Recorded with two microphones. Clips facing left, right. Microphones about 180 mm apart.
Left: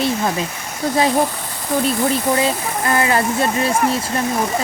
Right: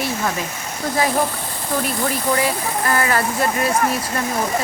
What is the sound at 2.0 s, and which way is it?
Speech, 25° left (ahead or behind).